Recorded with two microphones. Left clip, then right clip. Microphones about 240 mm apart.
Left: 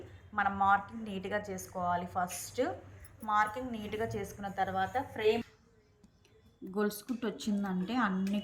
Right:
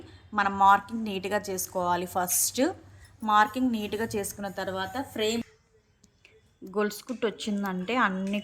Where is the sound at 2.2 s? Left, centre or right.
Right.